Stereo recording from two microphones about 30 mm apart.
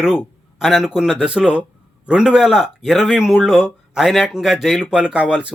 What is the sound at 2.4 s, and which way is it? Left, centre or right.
Speech, centre.